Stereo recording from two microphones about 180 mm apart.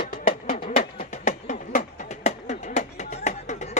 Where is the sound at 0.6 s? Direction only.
40° left (ahead or behind).